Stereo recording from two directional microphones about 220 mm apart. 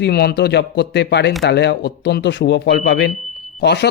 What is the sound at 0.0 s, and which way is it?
A man's voice, 45° left (ahead or behind).